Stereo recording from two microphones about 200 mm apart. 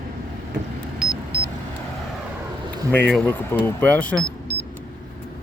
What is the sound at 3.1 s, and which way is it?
Speech, 10° left (ahead or behind).